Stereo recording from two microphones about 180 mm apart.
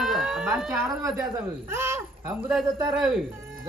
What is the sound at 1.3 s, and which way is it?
Speech, 15° right (ahead or behind).